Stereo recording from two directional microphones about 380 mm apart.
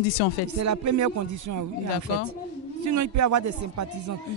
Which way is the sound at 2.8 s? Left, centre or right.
Right.